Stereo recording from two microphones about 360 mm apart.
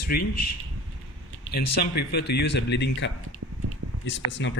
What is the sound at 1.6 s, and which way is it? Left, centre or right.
Speech, left.